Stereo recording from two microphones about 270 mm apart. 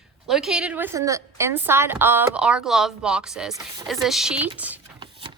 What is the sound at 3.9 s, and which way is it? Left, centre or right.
Speech, centre.